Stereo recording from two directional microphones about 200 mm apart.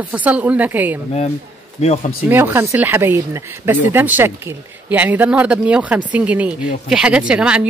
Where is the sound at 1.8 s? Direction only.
30° left (ahead or behind).